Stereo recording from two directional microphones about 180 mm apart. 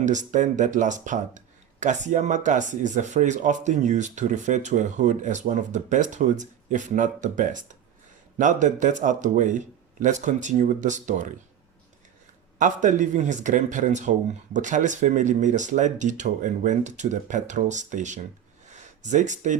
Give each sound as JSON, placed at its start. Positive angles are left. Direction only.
{"t": 0.0, "sound": "speech", "side_deg": -45}
{"t": 12.5, "sound": "speech", "side_deg": -45}
{"t": 18.7, "sound": "a sound", "side_deg": -40}